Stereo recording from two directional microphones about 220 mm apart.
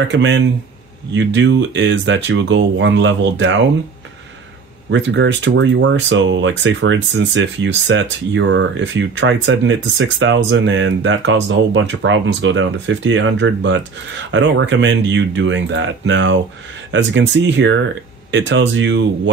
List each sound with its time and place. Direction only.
0.1 s speech: 55° right (ahead or behind)
4.9 s speech: 55° right (ahead or behind)